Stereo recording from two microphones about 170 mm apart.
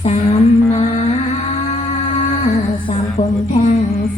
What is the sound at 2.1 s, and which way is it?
Music, 35° left (ahead or behind).